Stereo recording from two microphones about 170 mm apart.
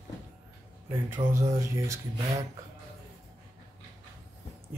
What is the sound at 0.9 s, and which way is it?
Speech, 15° right (ahead or behind).